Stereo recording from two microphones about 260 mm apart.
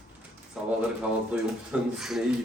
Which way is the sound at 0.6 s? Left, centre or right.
Centre.